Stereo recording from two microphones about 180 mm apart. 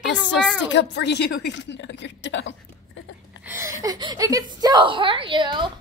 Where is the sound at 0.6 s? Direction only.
80° left.